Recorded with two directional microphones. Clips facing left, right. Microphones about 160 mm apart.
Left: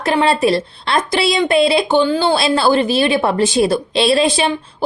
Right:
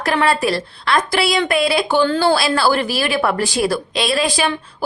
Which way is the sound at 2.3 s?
20° left (ahead or behind).